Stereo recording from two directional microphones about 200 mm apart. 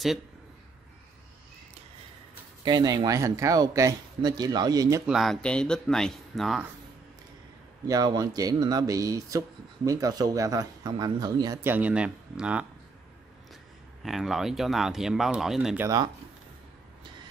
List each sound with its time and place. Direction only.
2.6 s speech: 20° right (ahead or behind)
5.0 s speech: centre (ahead or behind)
7.8 s speech: 20° right (ahead or behind)
14.0 s speech: centre (ahead or behind)